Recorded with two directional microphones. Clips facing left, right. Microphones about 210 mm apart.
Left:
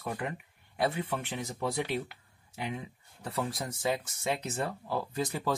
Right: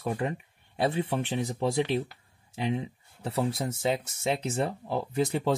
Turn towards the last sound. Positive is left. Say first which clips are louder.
# right 5 dB
turn(degrees=-25)  # may be behind; listen again after turning